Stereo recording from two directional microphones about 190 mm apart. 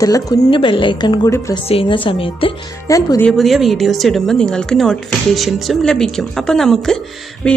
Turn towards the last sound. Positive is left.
turn(degrees=5)  # may be behind; listen again after turning